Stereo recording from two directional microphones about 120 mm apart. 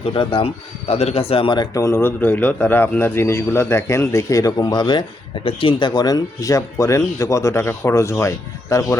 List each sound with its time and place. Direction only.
0.1 s speech: 45° left (ahead or behind)
1.7 s speech: 25° left (ahead or behind)